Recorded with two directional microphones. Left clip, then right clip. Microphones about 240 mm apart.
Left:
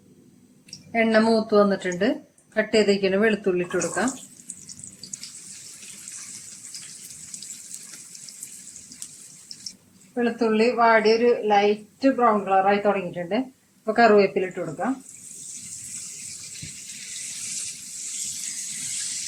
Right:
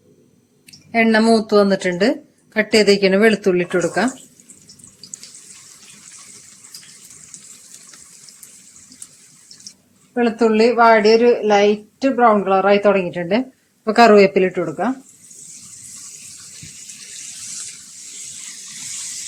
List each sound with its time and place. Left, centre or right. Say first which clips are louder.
0.9 s speech: right 5 dB; right
10.2 s speech: right 7 dB; right